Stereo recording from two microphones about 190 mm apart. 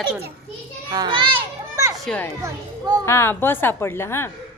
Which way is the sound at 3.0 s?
15° left (ahead or behind).